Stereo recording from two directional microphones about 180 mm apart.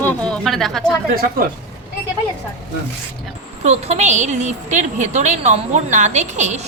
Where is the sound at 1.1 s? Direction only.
55° right (ahead or behind).